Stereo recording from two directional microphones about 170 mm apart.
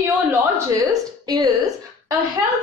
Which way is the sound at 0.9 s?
20° right (ahead or behind).